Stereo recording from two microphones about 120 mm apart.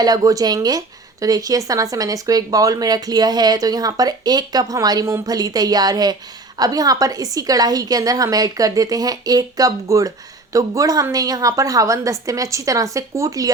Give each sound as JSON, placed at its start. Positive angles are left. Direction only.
{"t": 0.0, "sound": "a woman's voice", "side_deg": -35}